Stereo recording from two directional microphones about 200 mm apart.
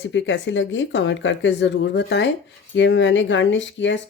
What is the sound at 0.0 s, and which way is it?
Speech, 65° left (ahead or behind).